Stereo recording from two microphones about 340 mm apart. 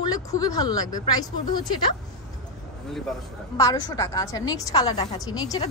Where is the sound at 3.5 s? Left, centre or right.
Centre.